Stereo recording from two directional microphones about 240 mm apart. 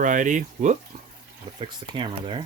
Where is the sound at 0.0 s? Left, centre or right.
Right.